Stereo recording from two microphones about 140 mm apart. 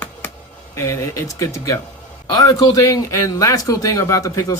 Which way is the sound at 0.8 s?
20° left (ahead or behind).